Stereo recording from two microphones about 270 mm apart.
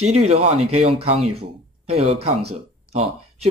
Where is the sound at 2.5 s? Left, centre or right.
Right.